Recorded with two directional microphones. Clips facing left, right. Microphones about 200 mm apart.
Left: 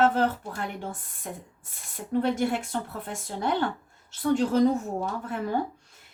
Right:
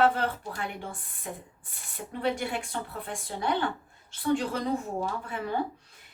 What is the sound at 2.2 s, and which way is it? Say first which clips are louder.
A woman's voice: left 2 dB; 45° left (ahead or behind).